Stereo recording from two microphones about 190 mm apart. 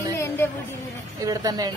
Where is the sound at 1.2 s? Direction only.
20° right (ahead or behind).